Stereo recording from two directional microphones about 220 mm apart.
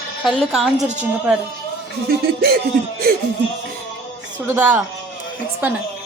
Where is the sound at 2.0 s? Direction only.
45° right (ahead or behind).